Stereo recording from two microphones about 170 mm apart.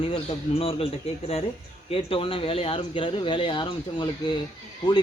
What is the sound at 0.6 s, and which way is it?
A man's voice, 35° left (ahead or behind).